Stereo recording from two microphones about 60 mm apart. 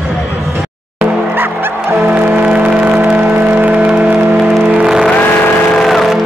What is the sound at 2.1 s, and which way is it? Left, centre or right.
Music, right.